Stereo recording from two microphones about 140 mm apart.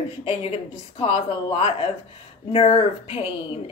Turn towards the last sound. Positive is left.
turn(degrees=40)  # may be behind; listen again after turning